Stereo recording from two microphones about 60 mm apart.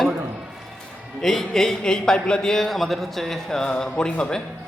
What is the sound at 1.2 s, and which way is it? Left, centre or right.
A man's voice, centre.